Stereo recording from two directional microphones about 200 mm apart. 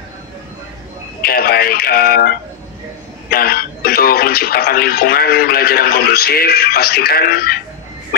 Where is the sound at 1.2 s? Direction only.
50° left (ahead or behind).